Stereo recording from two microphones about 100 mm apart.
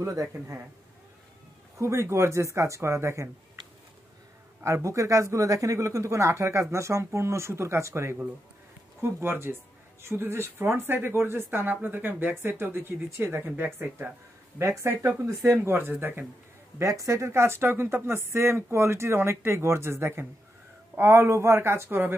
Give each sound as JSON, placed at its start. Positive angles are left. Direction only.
{"t": 0.0, "sound": "a man's voice", "side_deg": -30}
{"t": 1.8, "sound": "speech", "side_deg": -25}
{"t": 4.6, "sound": "a man's voice", "side_deg": -30}
{"t": 16.7, "sound": "speech", "side_deg": -35}